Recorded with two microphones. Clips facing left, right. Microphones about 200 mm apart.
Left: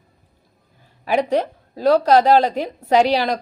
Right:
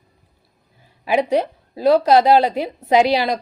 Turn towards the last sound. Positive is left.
turn(degrees=-10)  # may be behind; listen again after turning